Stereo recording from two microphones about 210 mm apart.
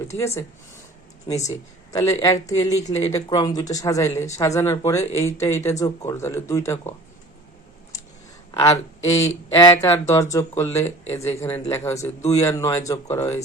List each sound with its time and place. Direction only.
0.1 s speech: 15° left (ahead or behind)
9.1 s speech: 15° left (ahead or behind)